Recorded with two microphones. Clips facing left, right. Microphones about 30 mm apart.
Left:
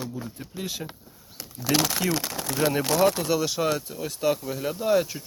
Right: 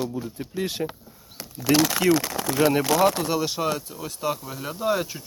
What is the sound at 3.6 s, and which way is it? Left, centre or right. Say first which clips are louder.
Speech: left 1 dB; centre.